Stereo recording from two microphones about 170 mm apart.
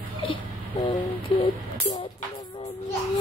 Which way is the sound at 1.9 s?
25° left (ahead or behind).